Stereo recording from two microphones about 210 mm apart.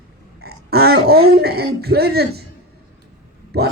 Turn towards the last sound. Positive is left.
turn(degrees=-50)  # may be behind; listen again after turning